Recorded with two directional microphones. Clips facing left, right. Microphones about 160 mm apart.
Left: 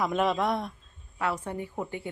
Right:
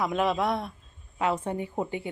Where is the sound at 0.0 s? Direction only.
Centre (ahead or behind).